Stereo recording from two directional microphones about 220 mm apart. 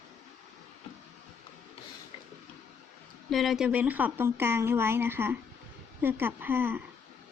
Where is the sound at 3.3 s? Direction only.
Centre (ahead or behind).